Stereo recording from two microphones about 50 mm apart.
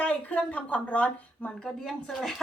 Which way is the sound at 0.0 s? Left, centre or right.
Left.